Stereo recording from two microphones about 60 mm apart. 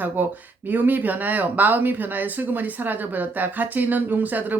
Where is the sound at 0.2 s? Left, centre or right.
Right.